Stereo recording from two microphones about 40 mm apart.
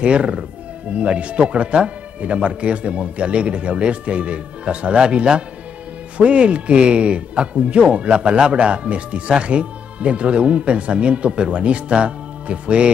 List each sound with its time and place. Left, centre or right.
0.0 s speech: right